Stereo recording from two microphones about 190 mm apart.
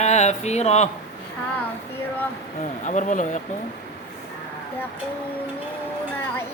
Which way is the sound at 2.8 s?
40° left (ahead or behind).